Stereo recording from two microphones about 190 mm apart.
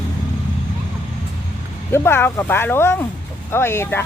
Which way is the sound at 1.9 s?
10° left (ahead or behind).